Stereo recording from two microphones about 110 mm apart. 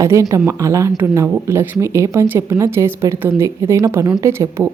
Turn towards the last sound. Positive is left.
turn(degrees=-25)  # may be behind; listen again after turning